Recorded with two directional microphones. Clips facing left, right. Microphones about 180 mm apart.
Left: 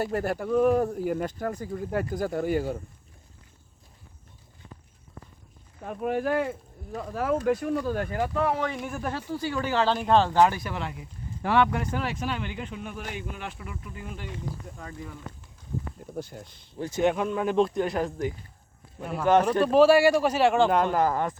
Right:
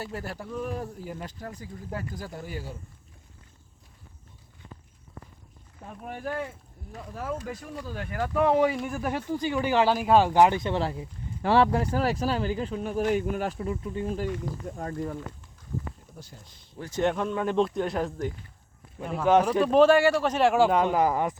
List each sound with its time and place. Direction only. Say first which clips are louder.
0.0 s speech: left 8 dB; 55° left (ahead or behind)
5.9 s speech: left 8 dB; 85° left
7.3 s speech: left 11 dB; 65° left (ahead or behind)
8.4 s speech: right 6 dB; 15° right (ahead or behind)
8.7 s speech: right 2 dB; centre (ahead or behind)
9.3 s speech: right 3 dB; 15° right (ahead or behind); by 14.3 s 30° right (ahead or behind)
14.8 s speech: right 8 dB; 45° right (ahead or behind)
16.1 s speech: left 11 dB; 60° left (ahead or behind)
16.9 s speech: left 1 dB; 5° left (ahead or behind); by 21.3 s 10° right (ahead or behind)